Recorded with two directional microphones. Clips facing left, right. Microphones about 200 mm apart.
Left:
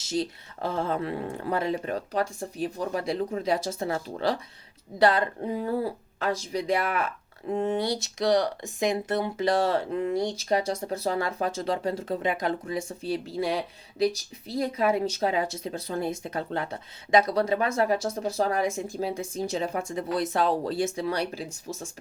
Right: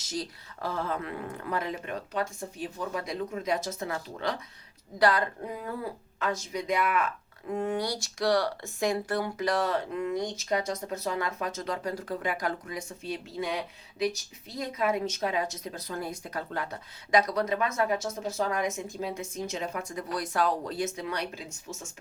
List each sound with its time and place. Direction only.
0.0 s speech: 25° left (ahead or behind)